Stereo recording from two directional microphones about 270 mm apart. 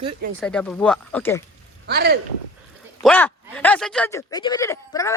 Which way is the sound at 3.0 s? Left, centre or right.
Centre.